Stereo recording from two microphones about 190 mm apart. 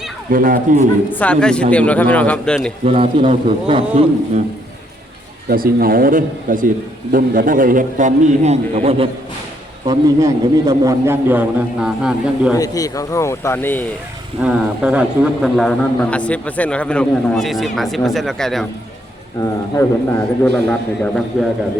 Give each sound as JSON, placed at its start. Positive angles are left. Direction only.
{"t": 0.3, "sound": "a man's voice", "side_deg": -45}
{"t": 1.1, "sound": "a man's voice", "side_deg": 5}
{"t": 2.8, "sound": "speech", "side_deg": -30}
{"t": 5.5, "sound": "a man's voice", "side_deg": -50}
{"t": 9.8, "sound": "a man's voice", "side_deg": -20}
{"t": 12.5, "sound": "a man's voice", "side_deg": 20}
{"t": 14.4, "sound": "a man's voice", "side_deg": -5}
{"t": 19.4, "sound": "a man's voice", "side_deg": 15}